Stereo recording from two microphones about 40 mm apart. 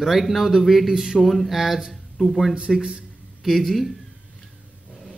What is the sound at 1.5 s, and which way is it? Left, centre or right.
A man's voice, centre.